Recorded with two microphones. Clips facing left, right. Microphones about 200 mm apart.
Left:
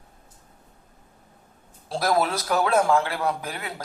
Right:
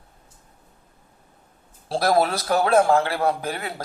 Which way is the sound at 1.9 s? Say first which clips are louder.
Right 3 dB; 30° right (ahead or behind).